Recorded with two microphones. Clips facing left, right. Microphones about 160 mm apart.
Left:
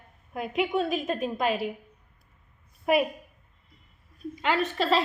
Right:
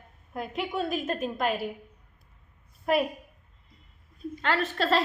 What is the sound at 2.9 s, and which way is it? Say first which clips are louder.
Speech: left 2 dB; 10° left (ahead or behind).